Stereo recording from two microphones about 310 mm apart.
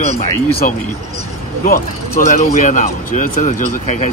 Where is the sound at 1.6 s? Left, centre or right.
Left.